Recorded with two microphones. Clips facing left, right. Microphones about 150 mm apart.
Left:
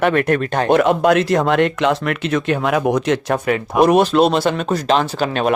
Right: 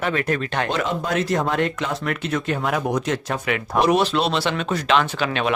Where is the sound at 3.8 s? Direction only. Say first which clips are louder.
Left 7 dB; 50° left (ahead or behind).